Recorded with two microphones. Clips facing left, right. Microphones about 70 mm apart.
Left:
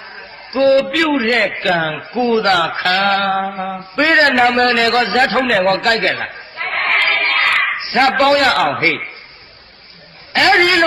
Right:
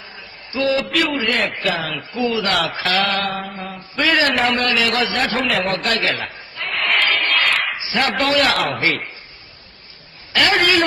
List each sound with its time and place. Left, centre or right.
0.2 s a sound: left
0.9 s a man's voice: left
1.7 s a man's voice: left
3.9 s a man's voice: left
5.6 s speech: left
5.9 s chatter: left
10.3 s a man's voice: left